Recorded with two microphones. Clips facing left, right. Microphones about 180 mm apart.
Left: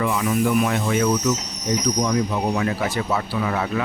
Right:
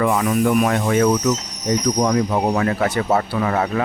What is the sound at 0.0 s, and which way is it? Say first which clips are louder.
Speech: right 3 dB; 55° right (ahead or behind).